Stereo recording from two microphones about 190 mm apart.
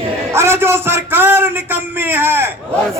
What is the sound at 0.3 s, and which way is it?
A man's voice, 10° right (ahead or behind).